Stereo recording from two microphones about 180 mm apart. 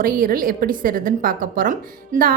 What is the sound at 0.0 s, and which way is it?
A woman's voice, 55° right (ahead or behind).